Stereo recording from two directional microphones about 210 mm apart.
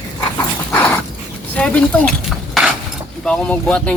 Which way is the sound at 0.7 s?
10° left (ahead or behind).